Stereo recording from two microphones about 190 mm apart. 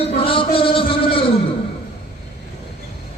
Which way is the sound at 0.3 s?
25° left (ahead or behind).